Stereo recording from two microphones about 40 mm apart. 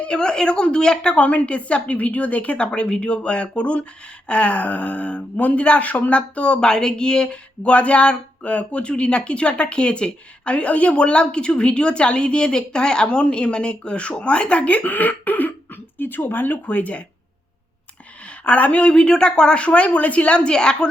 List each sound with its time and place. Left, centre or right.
0.0 s a woman's voice: left
6.6 s speech: centre; by 16.6 s left
16.6 s a woman's voice: left
18.4 s a woman's voice: left